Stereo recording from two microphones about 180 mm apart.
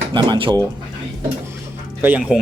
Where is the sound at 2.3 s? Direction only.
5° right (ahead or behind).